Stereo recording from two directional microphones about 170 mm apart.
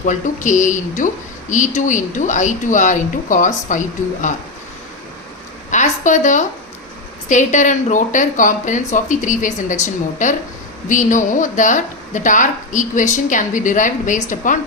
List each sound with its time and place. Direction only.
0.0 s speech: 50° left (ahead or behind)
5.7 s a woman's voice: 45° left (ahead or behind)